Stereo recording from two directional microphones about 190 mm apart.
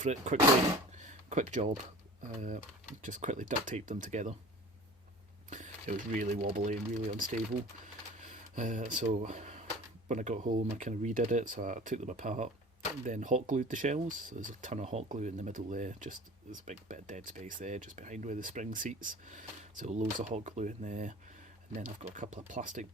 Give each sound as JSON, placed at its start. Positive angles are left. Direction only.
{"t": 0.0, "sound": "speech", "side_deg": -40}
{"t": 0.9, "sound": "a sound", "side_deg": -40}
{"t": 3.0, "sound": "speech", "side_deg": -40}
{"t": 5.5, "sound": "speech", "side_deg": -40}